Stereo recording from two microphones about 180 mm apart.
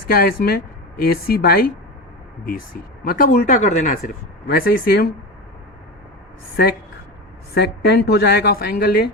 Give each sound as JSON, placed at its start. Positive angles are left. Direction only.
{"t": 0.1, "sound": "a woman's voice", "side_deg": 55}
{"t": 3.0, "sound": "speech", "side_deg": 55}
{"t": 7.5, "sound": "a woman's voice", "side_deg": 60}